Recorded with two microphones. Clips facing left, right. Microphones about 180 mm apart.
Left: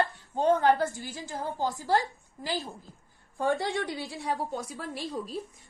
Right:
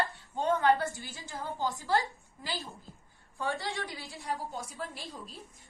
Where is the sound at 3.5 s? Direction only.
55° left (ahead or behind).